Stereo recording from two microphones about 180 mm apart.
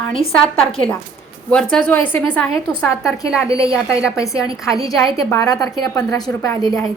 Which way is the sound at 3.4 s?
15° left (ahead or behind).